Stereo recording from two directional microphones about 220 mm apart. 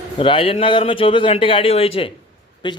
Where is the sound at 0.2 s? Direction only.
25° left (ahead or behind).